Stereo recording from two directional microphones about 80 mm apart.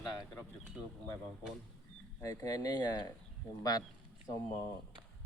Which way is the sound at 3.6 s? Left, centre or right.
Left.